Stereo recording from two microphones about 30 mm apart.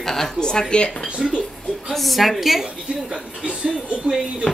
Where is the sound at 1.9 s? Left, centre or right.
Centre.